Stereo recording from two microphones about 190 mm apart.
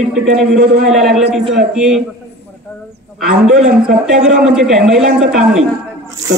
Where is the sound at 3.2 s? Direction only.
50° right (ahead or behind).